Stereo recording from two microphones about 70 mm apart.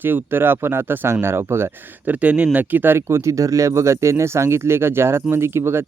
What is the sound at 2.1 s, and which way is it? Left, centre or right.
Speech, centre.